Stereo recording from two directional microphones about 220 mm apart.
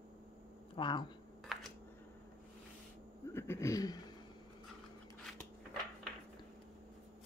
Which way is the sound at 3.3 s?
10° left (ahead or behind).